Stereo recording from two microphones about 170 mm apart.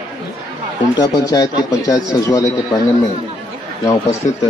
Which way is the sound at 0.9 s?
20° left (ahead or behind).